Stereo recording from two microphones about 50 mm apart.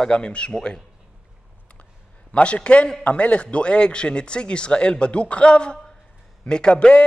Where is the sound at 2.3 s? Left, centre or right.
Left.